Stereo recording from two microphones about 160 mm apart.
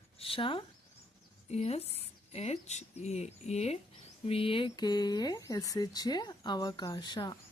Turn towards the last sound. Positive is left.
turn(degrees=30)  # may be behind; listen again after turning